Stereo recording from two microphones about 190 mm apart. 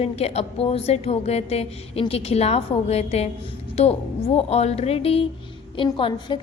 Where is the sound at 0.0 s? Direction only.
35° left (ahead or behind).